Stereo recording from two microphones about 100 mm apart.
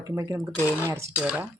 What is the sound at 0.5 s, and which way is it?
Speech, 25° left (ahead or behind).